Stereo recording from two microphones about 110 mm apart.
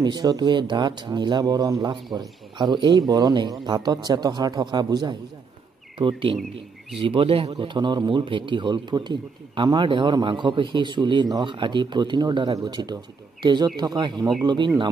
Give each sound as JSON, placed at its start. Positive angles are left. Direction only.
{"t": 0.0, "sound": "speech", "side_deg": -40}
{"t": 5.9, "sound": "a man's voice", "side_deg": -50}